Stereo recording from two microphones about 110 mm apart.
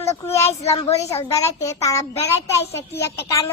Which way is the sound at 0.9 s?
75° left (ahead or behind).